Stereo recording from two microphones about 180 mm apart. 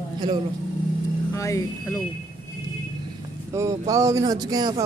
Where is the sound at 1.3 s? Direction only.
15° left (ahead or behind).